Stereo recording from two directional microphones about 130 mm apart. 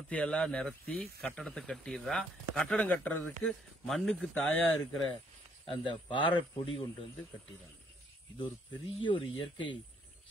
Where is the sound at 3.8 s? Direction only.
Centre (ahead or behind).